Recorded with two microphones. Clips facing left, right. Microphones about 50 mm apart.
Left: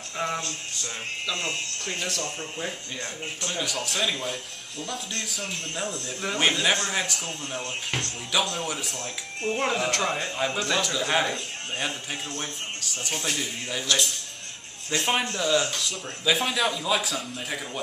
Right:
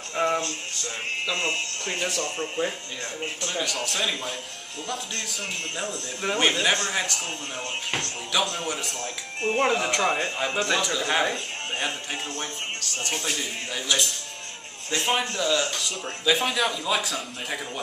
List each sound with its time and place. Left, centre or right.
0.1 s a sound: centre
1.3 s speech: right
2.0 s speech: centre
2.2 s speech: right
3.6 s speech: centre
9.0 s speech: right
9.7 s speech: centre
10.0 s speech: centre
13.2 s speech: centre